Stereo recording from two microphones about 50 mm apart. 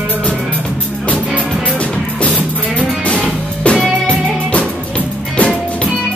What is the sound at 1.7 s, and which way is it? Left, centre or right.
Music, left.